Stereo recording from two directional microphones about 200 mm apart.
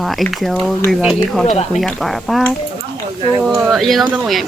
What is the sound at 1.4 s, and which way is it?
Speech, 35° left (ahead or behind).